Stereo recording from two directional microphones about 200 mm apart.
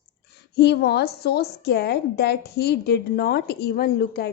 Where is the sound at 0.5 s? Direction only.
55° left (ahead or behind).